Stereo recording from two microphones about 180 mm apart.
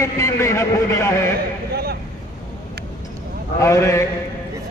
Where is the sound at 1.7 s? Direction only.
60° right (ahead or behind).